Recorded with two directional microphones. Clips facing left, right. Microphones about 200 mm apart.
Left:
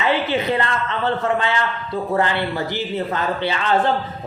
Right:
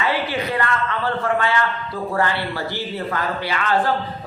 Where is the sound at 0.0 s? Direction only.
20° left (ahead or behind).